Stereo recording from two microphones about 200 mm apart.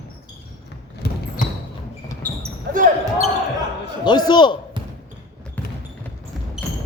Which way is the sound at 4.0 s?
20° left (ahead or behind).